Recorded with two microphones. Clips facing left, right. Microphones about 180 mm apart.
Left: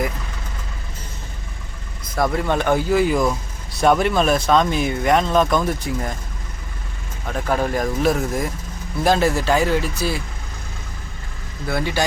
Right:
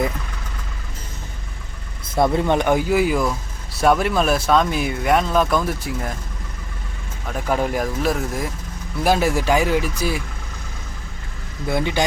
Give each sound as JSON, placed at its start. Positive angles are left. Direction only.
{"t": 2.1, "sound": "speech", "side_deg": -25}
{"t": 7.3, "sound": "speech", "side_deg": -5}
{"t": 11.7, "sound": "speech", "side_deg": -20}